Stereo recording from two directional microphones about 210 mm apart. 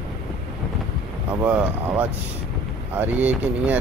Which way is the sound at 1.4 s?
5° right (ahead or behind).